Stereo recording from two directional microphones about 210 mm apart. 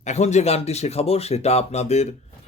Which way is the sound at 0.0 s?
35° left (ahead or behind).